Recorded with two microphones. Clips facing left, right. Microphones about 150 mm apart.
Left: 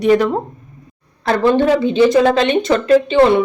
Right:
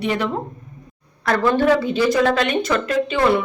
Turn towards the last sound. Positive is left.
turn(degrees=30)  # may be behind; listen again after turning